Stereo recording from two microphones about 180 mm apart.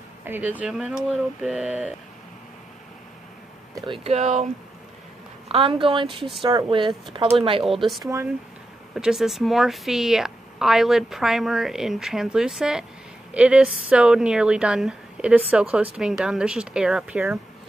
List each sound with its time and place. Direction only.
0.2 s speech: 10° right (ahead or behind)
3.7 s speech: 25° right (ahead or behind)
5.5 s speech: 30° right (ahead or behind)
7.8 s speech: centre (ahead or behind)